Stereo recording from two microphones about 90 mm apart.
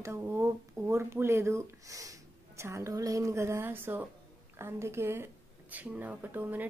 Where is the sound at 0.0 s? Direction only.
30° right (ahead or behind).